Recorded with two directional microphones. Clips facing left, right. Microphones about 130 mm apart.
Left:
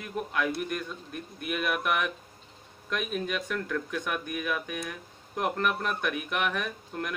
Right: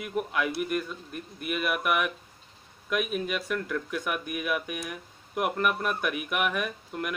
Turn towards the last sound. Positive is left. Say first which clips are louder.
# right 2 dB
turn(degrees=-5)  # may be behind; listen again after turning